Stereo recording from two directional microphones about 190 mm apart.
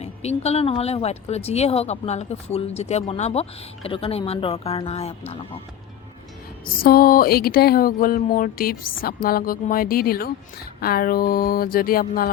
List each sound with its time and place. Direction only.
0.0 s speech: 35° left (ahead or behind)
6.8 s speech: 50° left (ahead or behind)